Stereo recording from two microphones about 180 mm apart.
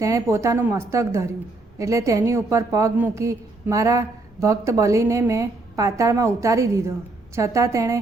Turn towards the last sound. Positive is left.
turn(degrees=-15)  # may be behind; listen again after turning